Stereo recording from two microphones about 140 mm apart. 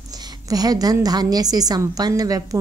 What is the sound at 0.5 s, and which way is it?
A woman's voice, 25° right (ahead or behind).